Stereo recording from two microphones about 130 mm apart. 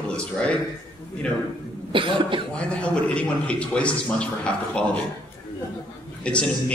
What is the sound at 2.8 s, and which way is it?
Speech, 10° left (ahead or behind).